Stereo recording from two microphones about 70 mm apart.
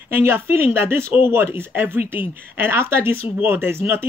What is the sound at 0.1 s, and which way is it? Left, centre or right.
Speech, right.